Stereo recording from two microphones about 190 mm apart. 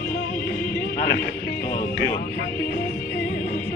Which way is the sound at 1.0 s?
55° left (ahead or behind).